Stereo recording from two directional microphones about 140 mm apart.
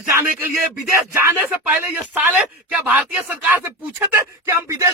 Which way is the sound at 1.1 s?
15° right (ahead or behind).